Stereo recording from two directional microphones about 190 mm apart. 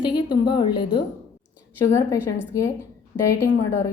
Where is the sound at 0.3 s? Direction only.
25° left (ahead or behind).